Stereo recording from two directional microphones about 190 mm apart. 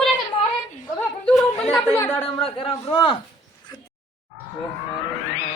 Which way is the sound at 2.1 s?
30° left (ahead or behind).